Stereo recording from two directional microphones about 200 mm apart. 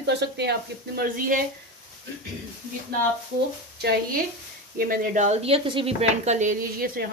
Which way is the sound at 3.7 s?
55° right (ahead or behind).